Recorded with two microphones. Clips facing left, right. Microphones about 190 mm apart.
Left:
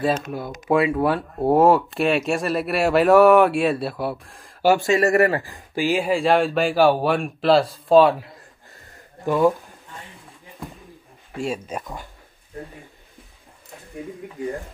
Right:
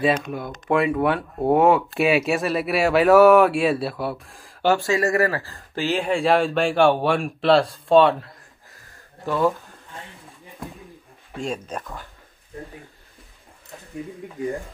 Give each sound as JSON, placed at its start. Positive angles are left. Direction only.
{"t": 0.0, "sound": "speech", "side_deg": 0}
{"t": 5.1, "sound": "speech", "side_deg": 20}
{"t": 9.2, "sound": "speech", "side_deg": 15}
{"t": 11.3, "sound": "speech", "side_deg": 5}